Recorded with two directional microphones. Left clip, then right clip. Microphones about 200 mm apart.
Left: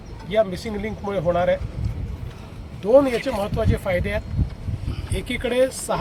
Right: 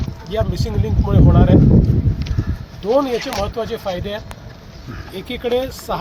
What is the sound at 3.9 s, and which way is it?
Speech, 40° left (ahead or behind).